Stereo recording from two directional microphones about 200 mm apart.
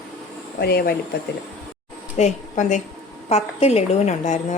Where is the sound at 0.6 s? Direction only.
50° left (ahead or behind).